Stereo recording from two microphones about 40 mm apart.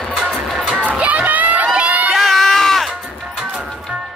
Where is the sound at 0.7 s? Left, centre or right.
Right.